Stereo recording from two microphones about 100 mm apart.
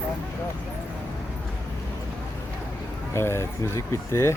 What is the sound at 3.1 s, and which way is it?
Speech, 25° left (ahead or behind).